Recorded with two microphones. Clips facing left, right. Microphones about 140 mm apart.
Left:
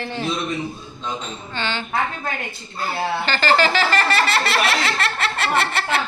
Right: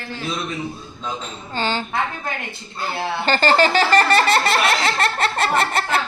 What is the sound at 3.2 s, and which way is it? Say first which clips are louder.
Laughter: right 3 dB; 40° right (ahead or behind).